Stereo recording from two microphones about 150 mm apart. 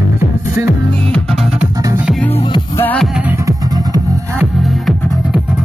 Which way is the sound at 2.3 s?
45° left (ahead or behind).